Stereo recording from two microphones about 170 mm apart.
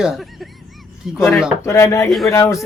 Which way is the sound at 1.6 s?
15° left (ahead or behind).